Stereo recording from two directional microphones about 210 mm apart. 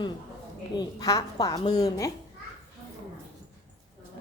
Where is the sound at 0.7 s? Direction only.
20° left (ahead or behind).